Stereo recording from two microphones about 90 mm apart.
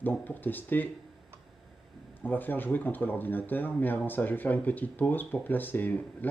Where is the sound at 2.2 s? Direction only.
20° left (ahead or behind).